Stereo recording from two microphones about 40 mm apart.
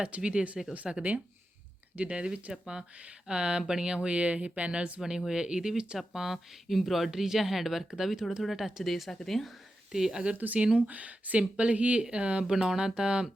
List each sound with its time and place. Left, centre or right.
0.0 s speech: right
0.9 s speech: centre
2.0 s speech: right
3.9 s speech: right
4.9 s speech: centre
8.9 s speech: centre
10.1 s speech: right
10.3 s speech: right
10.8 s speech: right
12.5 s speech: centre